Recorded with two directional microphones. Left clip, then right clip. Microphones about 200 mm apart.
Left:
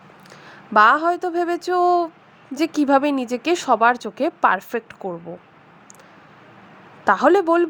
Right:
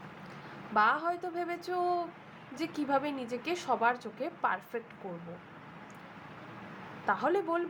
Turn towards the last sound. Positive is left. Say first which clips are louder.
# left 15 dB
turn(degrees=55)  # may be behind; listen again after turning